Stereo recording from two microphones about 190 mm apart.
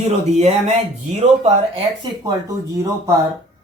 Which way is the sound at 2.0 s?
20° right (ahead or behind).